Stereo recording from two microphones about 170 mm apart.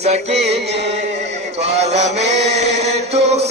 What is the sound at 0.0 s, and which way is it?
Music, 40° right (ahead or behind).